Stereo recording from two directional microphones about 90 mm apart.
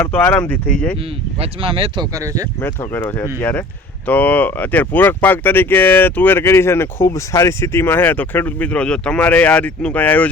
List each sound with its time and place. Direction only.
0.0 s speech: 20° left (ahead or behind)
1.4 s speech: 90° right
2.0 s speech: 40° right (ahead or behind)
2.6 s speech: 25° left (ahead or behind)